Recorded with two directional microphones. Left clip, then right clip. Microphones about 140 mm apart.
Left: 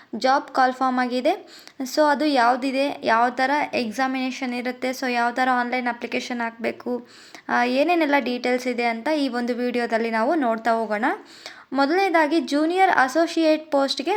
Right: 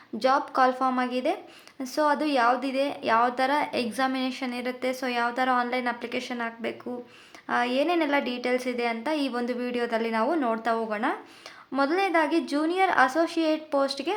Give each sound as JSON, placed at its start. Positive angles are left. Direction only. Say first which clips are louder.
{"t": 0.2, "sound": "a woman's voice", "louder": "left 3 dB", "side_deg": 20}